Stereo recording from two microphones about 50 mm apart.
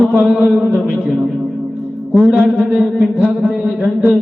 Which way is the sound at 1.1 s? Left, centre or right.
Centre.